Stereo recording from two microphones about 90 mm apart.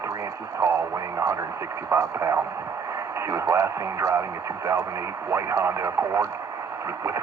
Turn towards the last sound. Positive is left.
turn(degrees=-35)  # may be behind; listen again after turning